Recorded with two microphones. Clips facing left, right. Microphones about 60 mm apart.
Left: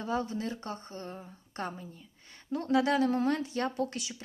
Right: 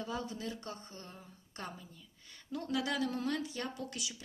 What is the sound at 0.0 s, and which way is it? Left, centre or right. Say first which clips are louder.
A woman's voice: left 7 dB; left.